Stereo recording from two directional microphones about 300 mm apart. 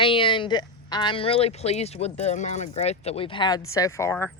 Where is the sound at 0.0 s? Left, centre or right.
Centre.